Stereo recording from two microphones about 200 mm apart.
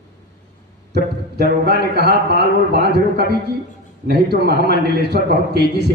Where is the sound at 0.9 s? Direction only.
55° right (ahead or behind).